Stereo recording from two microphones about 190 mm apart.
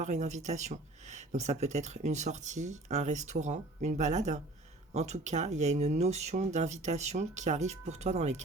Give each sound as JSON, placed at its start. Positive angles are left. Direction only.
{"t": 0.0, "sound": "speech", "side_deg": -40}